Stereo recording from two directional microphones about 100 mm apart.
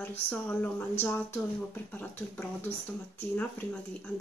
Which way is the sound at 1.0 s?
20° left (ahead or behind).